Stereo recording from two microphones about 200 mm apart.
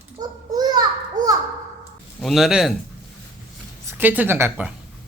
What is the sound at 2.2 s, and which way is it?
Speech, centre (ahead or behind).